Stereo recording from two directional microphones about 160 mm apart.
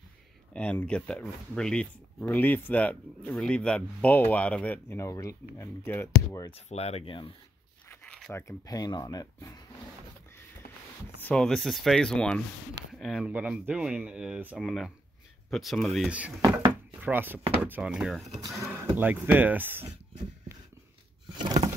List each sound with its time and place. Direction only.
0.5 s speech: 10° left (ahead or behind)
6.5 s speech: 40° left (ahead or behind)
8.3 s speech: 15° left (ahead or behind)
11.2 s speech: 5° left (ahead or behind)
16.1 s speech: 10° right (ahead or behind)
16.3 s speech: 25° right (ahead or behind)
17.0 s speech: 10° right (ahead or behind)
18.6 s speech: 15° right (ahead or behind)